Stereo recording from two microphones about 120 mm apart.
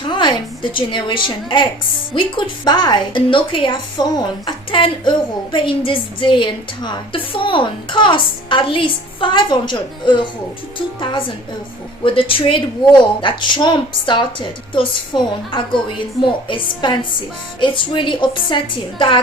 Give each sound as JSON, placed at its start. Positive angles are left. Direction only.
{"t": 0.1, "sound": "a woman's voice", "side_deg": 40}